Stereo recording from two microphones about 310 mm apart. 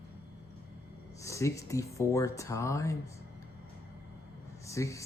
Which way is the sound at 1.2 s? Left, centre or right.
Centre.